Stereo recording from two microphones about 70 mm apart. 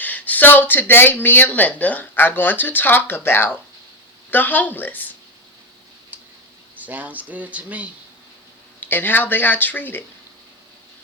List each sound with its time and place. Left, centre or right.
0.0 s speech: left
6.1 s tick-tock: right
6.7 s speech: right
8.8 s speech: left